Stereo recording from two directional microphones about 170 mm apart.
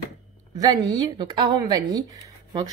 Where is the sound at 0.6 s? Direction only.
20° right (ahead or behind).